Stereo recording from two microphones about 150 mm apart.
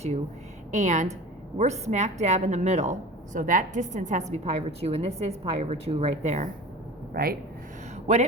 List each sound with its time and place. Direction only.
0.7 s a woman's voice: 50° right (ahead or behind)
3.3 s a woman's voice: 60° right (ahead or behind)
7.1 s speech: 85° right